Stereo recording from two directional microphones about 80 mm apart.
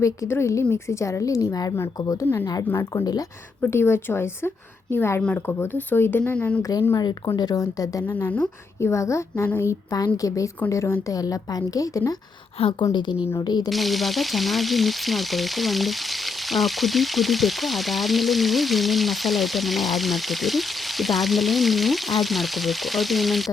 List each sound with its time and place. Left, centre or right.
0.0 s a woman's voice: left
2.4 s a woman's voice: left
3.6 s a woman's voice: left
5.2 s a woman's voice: centre
6.6 s a woman's voice: left
11.1 s speech: left
12.9 s a woman's voice: left
13.4 s a woman's voice: left
13.7 s frying: centre